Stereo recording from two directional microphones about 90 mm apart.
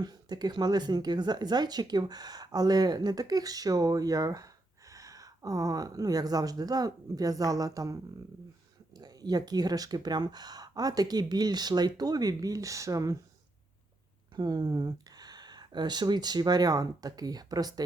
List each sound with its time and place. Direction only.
0.0 s speech: 50° right (ahead or behind)
9.0 s speech: 50° right (ahead or behind)
14.3 s speech: 50° right (ahead or behind)